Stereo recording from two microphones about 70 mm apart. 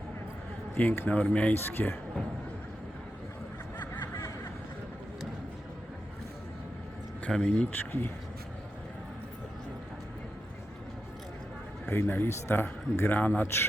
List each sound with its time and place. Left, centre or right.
0.8 s a man's voice: left
1.5 s speech: left
7.3 s speech: centre
7.7 s a man's voice: left
11.9 s a man's voice: left